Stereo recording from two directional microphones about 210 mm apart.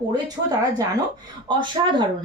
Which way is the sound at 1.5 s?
20° right (ahead or behind).